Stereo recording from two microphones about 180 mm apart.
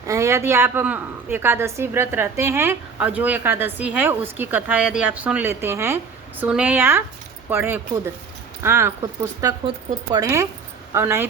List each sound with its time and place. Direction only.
0.1 s a woman's voice: 15° right (ahead or behind)